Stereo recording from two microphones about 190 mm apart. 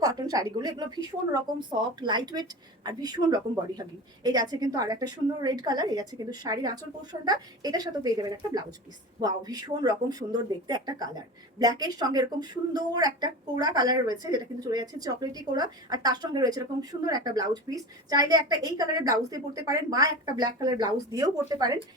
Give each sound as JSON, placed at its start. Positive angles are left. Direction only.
{"t": 0.0, "sound": "a woman's voice", "side_deg": -20}